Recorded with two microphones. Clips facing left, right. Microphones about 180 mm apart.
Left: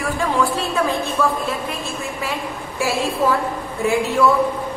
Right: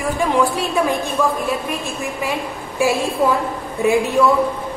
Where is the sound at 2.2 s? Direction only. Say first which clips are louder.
Right 2 dB; 15° right (ahead or behind).